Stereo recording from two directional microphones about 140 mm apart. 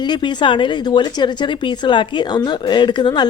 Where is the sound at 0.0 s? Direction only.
30° left (ahead or behind).